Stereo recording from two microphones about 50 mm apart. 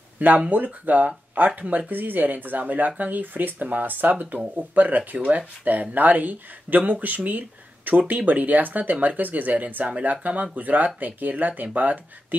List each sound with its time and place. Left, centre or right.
0.5 s speech: right